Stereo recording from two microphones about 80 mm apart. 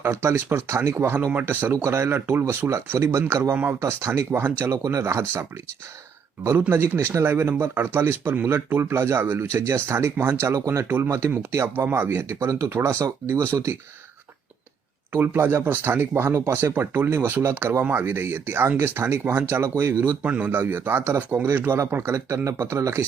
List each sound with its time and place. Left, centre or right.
0.0 s speech: right
1.6 s speech: right
3.5 s speech: right
3.8 s speech: right
6.6 s speech: right
10.8 s speech: right
15.1 s speech: right
20.2 s speech: centre